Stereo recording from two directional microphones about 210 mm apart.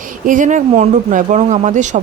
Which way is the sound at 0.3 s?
40° right (ahead or behind).